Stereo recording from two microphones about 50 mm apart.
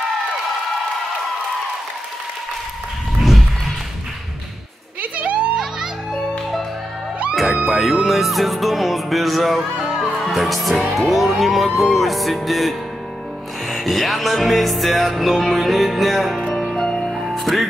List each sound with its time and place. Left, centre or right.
3.2 s run: centre
5.1 s a sound: right
6.1 s music: centre
7.7 s music: centre
10.1 s speech: centre
11.0 s music: centre
16.3 s music: centre
17.1 s music: centre